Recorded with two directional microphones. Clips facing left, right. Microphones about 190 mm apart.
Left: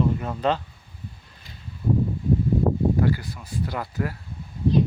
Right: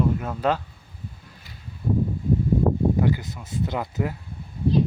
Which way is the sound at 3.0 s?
20° right (ahead or behind).